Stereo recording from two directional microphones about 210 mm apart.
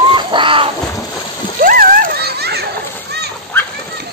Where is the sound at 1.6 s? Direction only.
40° right (ahead or behind).